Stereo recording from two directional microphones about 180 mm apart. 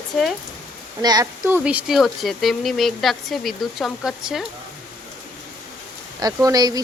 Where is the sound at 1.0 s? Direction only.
20° right (ahead or behind); by 4.5 s centre (ahead or behind).